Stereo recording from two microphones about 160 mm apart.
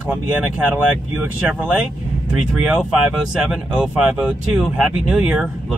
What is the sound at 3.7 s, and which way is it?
Speech, 5° right (ahead or behind).